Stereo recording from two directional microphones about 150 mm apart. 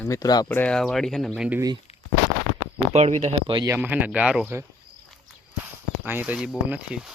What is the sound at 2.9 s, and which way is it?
Speech, 50° right (ahead or behind).